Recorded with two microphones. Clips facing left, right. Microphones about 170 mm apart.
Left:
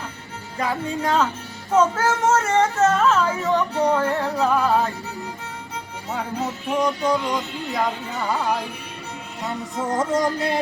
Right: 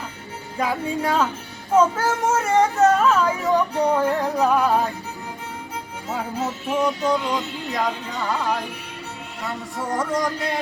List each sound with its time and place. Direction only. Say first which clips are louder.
0.6 s speech: right 1 dB; 10° right (ahead or behind)
6.1 s music: even; 5° right (ahead or behind)
9.4 s music: left 2 dB; 20° left (ahead or behind)